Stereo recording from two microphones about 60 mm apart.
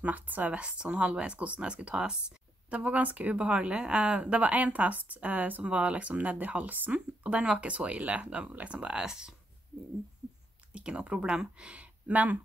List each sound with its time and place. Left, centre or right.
0.0 s speech: right; by 9.3 s centre
10.7 s speech: centre